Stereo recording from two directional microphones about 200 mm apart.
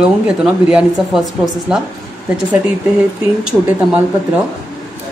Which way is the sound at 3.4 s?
5° right (ahead or behind).